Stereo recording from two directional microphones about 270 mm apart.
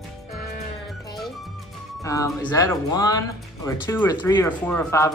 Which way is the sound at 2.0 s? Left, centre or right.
Centre.